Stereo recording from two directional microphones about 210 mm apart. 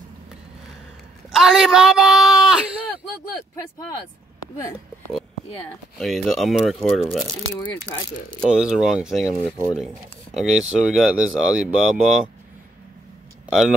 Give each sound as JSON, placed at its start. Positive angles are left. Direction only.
{"t": 1.3, "sound": "a woman's voice", "side_deg": 0}
{"t": 5.9, "sound": "speech", "side_deg": 0}
{"t": 10.3, "sound": "speech", "side_deg": 0}
{"t": 13.5, "sound": "speech", "side_deg": -5}